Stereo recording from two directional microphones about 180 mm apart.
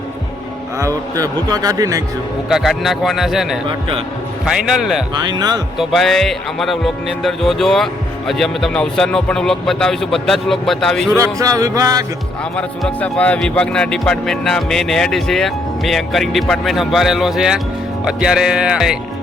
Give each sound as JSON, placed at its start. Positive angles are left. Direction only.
{"t": 1.1, "sound": "speech", "side_deg": -20}
{"t": 2.5, "sound": "speech", "side_deg": 0}
{"t": 3.7, "sound": "speech", "side_deg": -30}
{"t": 4.4, "sound": "speech", "side_deg": -5}
{"t": 5.3, "sound": "speech", "side_deg": -25}
{"t": 5.7, "sound": "speech", "side_deg": 0}
{"t": 11.2, "sound": "speech", "side_deg": -20}
{"t": 12.5, "sound": "speech", "side_deg": 5}